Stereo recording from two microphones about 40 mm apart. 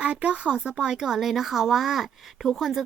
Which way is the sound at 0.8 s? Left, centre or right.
Centre.